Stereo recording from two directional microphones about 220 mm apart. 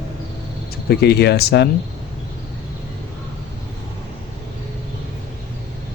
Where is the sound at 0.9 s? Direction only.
45° left (ahead or behind).